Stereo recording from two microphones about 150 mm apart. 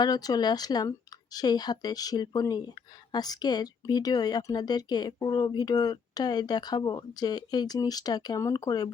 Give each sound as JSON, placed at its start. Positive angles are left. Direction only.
{"t": 0.0, "sound": "speech", "side_deg": 25}